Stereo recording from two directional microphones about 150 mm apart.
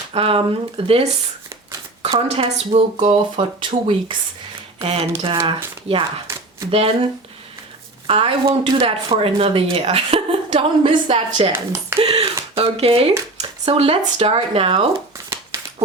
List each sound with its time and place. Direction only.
0.1 s speech: 40° right (ahead or behind)
6.2 s a sound: 20° right (ahead or behind)
6.7 s speech: 40° right (ahead or behind)
11.5 s speech: 15° right (ahead or behind)
11.9 s speech: 40° right (ahead or behind)